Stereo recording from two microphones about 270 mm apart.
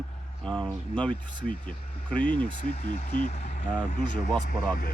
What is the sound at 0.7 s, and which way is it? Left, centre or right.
Speech, centre.